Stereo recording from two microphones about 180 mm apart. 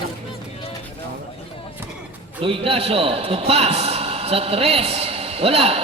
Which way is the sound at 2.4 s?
30° right (ahead or behind).